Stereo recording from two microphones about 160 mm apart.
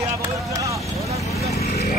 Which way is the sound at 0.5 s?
20° right (ahead or behind).